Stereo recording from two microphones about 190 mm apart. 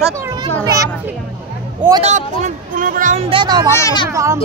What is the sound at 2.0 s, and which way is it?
Speech, 40° right (ahead or behind).